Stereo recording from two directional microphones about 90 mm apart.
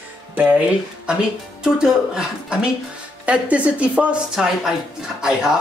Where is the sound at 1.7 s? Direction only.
10° right (ahead or behind).